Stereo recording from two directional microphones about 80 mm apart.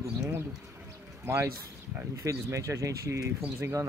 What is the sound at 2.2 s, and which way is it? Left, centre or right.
Speech, right.